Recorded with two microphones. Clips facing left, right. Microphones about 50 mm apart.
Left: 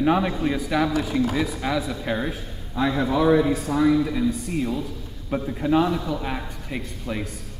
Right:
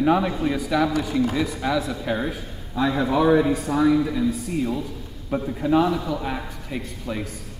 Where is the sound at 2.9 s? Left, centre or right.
Centre.